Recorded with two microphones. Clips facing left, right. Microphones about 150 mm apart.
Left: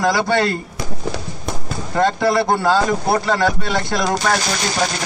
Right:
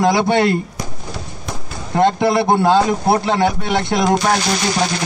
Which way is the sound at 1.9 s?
20° right (ahead or behind).